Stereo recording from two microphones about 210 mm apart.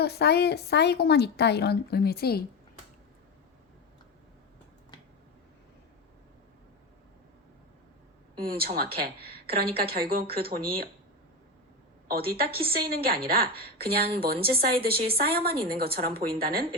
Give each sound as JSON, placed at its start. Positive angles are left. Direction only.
{"t": 0.0, "sound": "speech", "side_deg": 50}
{"t": 8.4, "sound": "a woman's voice", "side_deg": -45}
{"t": 12.0, "sound": "a woman's voice", "side_deg": -45}